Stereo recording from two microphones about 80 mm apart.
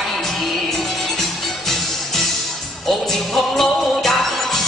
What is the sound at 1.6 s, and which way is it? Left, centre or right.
Music, centre.